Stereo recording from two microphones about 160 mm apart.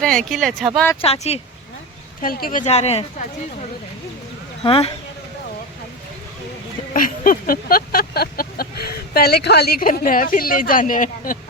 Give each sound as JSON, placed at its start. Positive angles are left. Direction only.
{"t": 0.3, "sound": "speech", "side_deg": 0}
{"t": 1.0, "sound": "speech", "side_deg": 40}
{"t": 2.2, "sound": "speech", "side_deg": 65}
{"t": 4.6, "sound": "speech", "side_deg": 35}
{"t": 6.9, "sound": "a sound", "side_deg": 60}